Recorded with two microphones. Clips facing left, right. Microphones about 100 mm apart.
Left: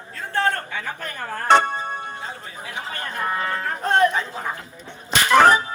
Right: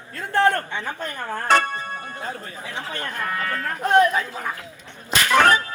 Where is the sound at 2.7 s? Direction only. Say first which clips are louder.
Even; 15° left (ahead or behind).